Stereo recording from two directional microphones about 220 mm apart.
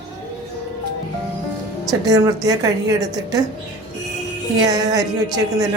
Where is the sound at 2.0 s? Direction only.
15° right (ahead or behind).